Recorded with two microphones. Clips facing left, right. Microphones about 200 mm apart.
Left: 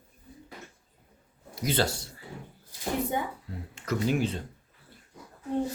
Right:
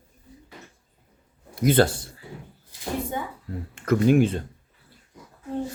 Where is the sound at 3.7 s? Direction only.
55° right (ahead or behind).